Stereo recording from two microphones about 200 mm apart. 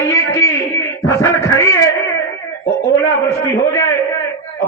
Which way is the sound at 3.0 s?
15° left (ahead or behind).